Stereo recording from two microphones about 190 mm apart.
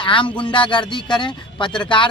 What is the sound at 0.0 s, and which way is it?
Speech, 25° left (ahead or behind).